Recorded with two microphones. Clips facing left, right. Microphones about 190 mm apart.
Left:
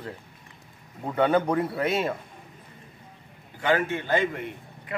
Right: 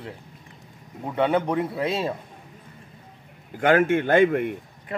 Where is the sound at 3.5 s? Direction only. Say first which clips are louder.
Right 6 dB; 50° right (ahead or behind).